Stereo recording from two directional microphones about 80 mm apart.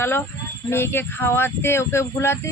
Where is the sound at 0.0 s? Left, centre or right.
Left.